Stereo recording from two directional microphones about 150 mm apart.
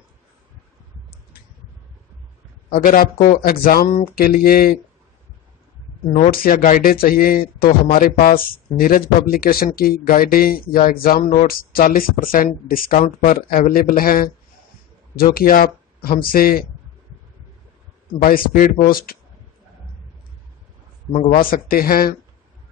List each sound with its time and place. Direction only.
2.7 s speech: 70° left (ahead or behind)
6.3 s speech: 75° left (ahead or behind)
18.2 s speech: 75° left (ahead or behind)
21.1 s speech: 55° left (ahead or behind); by 22.1 s 75° left (ahead or behind)